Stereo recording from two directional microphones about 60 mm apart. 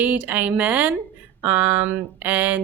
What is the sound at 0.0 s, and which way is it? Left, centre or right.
Speech, right.